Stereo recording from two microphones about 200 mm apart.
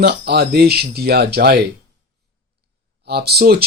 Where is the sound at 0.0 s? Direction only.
55° right (ahead or behind).